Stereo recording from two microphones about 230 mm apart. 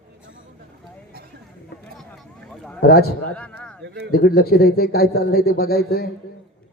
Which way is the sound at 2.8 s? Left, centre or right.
Left.